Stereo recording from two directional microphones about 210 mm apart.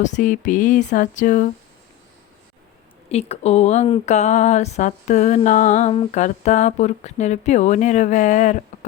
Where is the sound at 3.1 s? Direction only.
30° left (ahead or behind).